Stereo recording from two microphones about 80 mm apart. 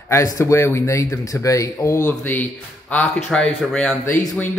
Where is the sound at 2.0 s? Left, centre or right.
Left.